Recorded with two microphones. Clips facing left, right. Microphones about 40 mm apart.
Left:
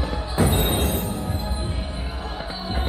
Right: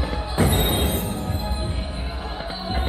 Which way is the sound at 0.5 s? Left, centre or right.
Centre.